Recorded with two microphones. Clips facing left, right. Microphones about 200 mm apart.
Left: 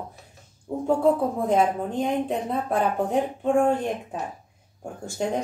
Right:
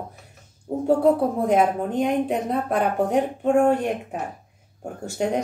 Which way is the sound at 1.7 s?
55° right (ahead or behind).